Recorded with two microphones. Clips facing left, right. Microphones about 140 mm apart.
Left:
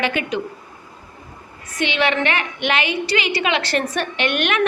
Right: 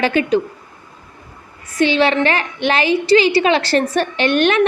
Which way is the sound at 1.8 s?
35° right (ahead or behind).